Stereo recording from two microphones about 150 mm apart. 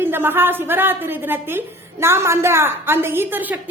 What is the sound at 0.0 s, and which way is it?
Speech, 15° right (ahead or behind).